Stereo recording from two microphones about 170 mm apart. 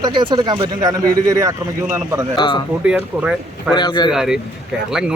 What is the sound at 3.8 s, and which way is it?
Speech, 25° left (ahead or behind).